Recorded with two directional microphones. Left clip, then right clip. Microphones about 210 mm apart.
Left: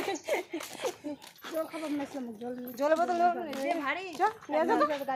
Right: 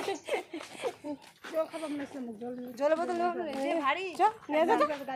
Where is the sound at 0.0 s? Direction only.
Centre (ahead or behind).